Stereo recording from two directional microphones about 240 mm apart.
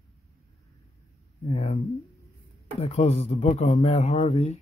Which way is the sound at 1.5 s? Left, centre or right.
Left.